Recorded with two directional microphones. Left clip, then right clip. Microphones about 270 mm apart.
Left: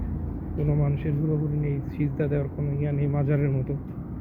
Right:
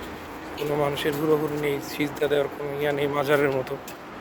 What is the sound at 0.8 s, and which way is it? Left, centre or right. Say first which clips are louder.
Speech: right 7 dB; right.